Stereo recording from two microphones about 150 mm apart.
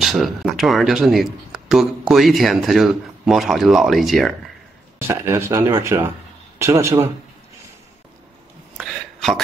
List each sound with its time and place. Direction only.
0.0 s speech: centre (ahead or behind)
4.9 s speech: 15° right (ahead or behind)
8.7 s a sound: centre (ahead or behind)